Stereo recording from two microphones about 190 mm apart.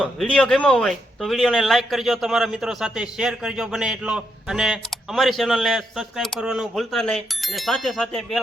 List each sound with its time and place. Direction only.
0.0 s speech: 5° left (ahead or behind)